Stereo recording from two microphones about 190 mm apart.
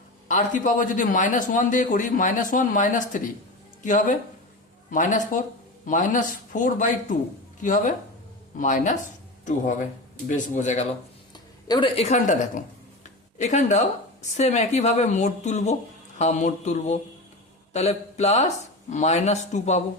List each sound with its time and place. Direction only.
0.3 s a man's voice: 40° left (ahead or behind)
10.2 s speech: 40° left (ahead or behind)